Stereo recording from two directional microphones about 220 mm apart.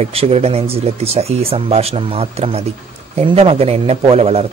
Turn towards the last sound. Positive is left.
turn(degrees=-25)  # may be behind; listen again after turning